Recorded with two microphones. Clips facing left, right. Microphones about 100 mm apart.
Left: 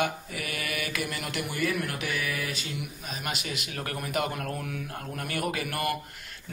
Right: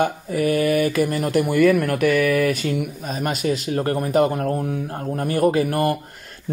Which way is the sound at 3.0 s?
40° right (ahead or behind).